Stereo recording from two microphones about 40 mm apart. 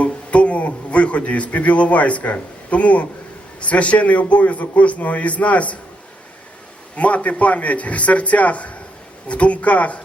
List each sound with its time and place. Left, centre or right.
0.0 s a man's voice: left
6.9 s a man's voice: left